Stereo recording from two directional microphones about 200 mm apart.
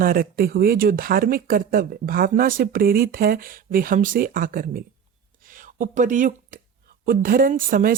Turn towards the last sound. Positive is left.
turn(degrees=-45)  # may be behind; listen again after turning